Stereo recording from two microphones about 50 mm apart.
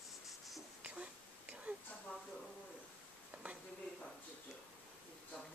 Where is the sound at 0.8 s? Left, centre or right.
Right.